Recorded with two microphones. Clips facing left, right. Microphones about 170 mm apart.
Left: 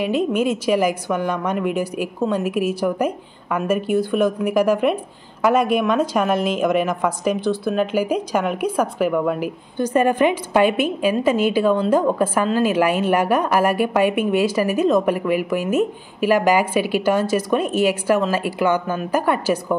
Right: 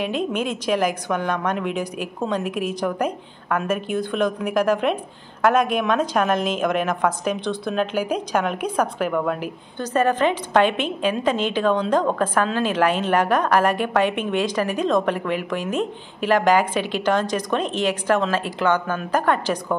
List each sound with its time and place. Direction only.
0.0 s a woman's voice: 10° left (ahead or behind)